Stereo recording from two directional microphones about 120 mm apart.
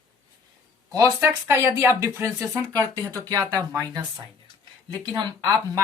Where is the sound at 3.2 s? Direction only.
30° right (ahead or behind).